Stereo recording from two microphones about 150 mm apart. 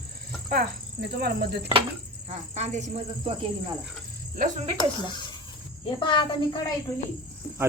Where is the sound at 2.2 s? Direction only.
50° right (ahead or behind).